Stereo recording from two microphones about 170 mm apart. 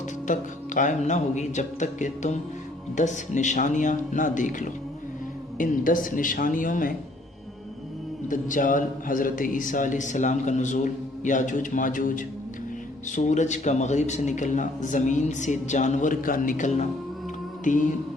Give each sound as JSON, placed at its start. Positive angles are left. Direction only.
{"t": 0.3, "sound": "a man's voice", "side_deg": 45}
{"t": 8.3, "sound": "a man's voice", "side_deg": 50}
{"t": 17.6, "sound": "music", "side_deg": 50}